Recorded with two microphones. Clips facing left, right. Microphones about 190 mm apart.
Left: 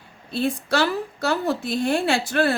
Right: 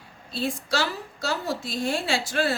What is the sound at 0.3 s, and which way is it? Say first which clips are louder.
A woman's voice: left 5 dB; 55° left (ahead or behind).